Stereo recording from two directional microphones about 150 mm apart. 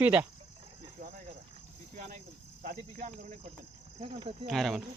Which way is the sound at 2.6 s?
60° right (ahead or behind).